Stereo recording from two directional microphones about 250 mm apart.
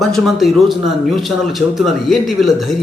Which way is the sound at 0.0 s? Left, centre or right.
Centre.